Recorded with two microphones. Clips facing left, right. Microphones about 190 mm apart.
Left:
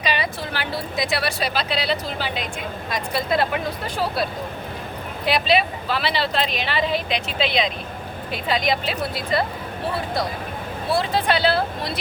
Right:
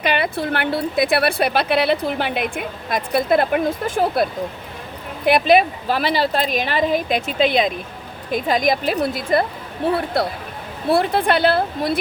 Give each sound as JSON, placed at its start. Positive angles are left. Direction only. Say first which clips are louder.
{"t": 0.0, "sound": "a woman's voice", "louder": "right 5 dB", "side_deg": -55}